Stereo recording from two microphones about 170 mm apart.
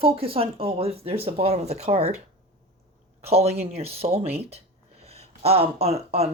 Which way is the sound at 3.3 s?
40° right (ahead or behind).